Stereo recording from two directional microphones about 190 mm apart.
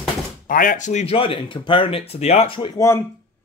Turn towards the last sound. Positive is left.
turn(degrees=15)  # may be behind; listen again after turning